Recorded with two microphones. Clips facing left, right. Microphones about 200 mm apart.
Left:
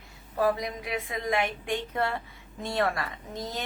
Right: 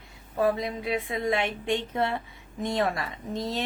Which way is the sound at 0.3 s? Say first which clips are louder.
Right 1 dB; 25° right (ahead or behind).